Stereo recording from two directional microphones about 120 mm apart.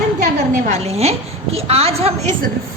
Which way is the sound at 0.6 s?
65° right (ahead or behind).